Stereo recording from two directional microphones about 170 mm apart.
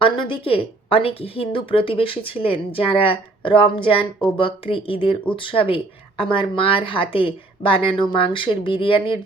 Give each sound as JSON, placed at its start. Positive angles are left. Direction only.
{"t": 0.0, "sound": "a woman's voice", "side_deg": 30}